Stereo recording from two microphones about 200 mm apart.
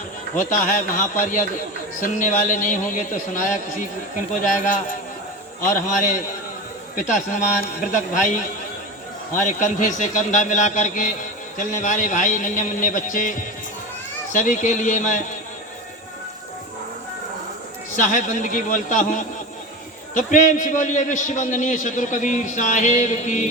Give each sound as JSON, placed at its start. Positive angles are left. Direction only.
{"t": 0.3, "sound": "a man's voice", "side_deg": 40}
{"t": 9.3, "sound": "a man's voice", "side_deg": 40}
{"t": 17.9, "sound": "a man's voice", "side_deg": 40}